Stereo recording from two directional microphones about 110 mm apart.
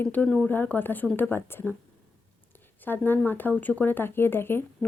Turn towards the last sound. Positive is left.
turn(degrees=20)  # may be behind; listen again after turning